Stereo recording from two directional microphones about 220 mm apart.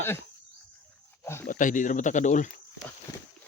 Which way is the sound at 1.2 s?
10° left (ahead or behind).